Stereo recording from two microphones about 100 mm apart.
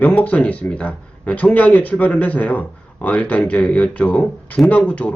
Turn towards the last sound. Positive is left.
turn(degrees=15)  # may be behind; listen again after turning